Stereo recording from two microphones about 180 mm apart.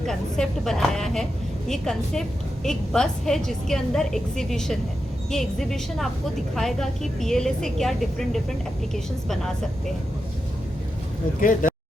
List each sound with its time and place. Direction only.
0.0 s a woman's voice: centre (ahead or behind)
11.3 s speech: 50° left (ahead or behind)